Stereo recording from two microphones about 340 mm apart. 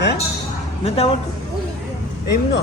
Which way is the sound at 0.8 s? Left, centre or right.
Centre.